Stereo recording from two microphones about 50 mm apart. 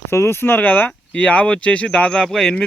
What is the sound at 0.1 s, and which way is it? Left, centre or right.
Speech, left.